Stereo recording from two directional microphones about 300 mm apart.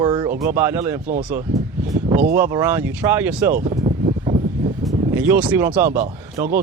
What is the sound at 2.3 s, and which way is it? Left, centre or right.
Speech, centre.